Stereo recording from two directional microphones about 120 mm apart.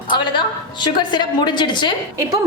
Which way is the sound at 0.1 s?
40° left (ahead or behind).